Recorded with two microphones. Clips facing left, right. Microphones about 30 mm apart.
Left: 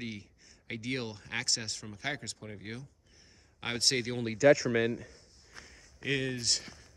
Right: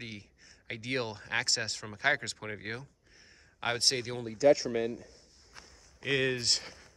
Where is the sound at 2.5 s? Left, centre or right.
Right.